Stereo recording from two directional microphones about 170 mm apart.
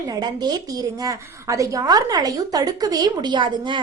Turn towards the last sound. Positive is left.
turn(degrees=-30)  # may be behind; listen again after turning